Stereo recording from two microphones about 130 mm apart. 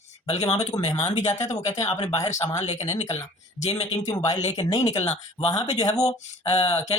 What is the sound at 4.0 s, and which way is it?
Mantra, 30° left (ahead or behind).